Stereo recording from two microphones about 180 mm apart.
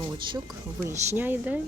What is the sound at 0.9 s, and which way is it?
Speech, 15° right (ahead or behind).